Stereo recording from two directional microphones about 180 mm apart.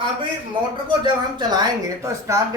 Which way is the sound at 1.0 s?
25° right (ahead or behind).